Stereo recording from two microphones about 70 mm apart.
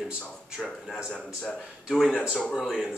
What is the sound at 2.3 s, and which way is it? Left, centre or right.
Speech, centre.